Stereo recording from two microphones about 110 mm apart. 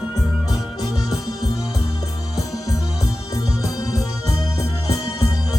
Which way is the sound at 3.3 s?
30° left (ahead or behind).